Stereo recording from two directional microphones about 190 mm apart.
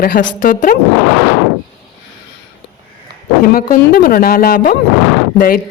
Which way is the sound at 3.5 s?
55° left (ahead or behind).